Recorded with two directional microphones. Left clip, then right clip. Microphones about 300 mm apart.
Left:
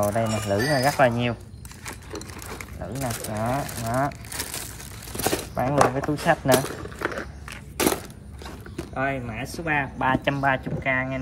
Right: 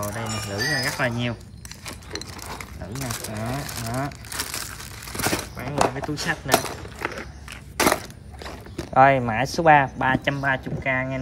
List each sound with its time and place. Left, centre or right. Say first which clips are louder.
0.0 s speech: left 6 dB; centre
1.9 s a sound: right 1 dB; centre
5.8 s speech: left 1 dB; centre
7.7 s crushing: right 4 dB; centre
8.9 s speech: right 12 dB; right
9.4 s speech: right 10 dB; centre